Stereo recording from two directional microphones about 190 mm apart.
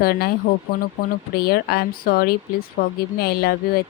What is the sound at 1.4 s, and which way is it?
Speech, 55° left (ahead or behind).